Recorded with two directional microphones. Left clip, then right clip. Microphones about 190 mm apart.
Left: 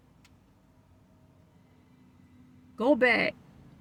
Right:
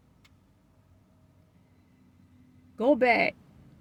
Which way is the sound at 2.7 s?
20° left (ahead or behind).